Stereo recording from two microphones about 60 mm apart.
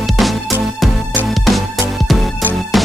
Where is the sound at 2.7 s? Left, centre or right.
Centre.